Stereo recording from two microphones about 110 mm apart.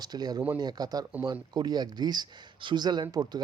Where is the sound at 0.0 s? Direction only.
35° right (ahead or behind).